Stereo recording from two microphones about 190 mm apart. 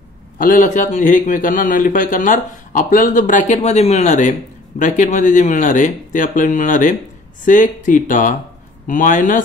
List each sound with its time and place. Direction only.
0.4 s a man's voice: 45° left (ahead or behind)